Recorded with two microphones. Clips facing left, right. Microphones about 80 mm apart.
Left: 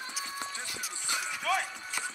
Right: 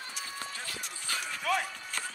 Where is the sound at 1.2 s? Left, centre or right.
Centre.